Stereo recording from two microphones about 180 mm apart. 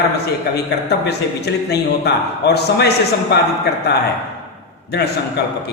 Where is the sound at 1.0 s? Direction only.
65° left (ahead or behind).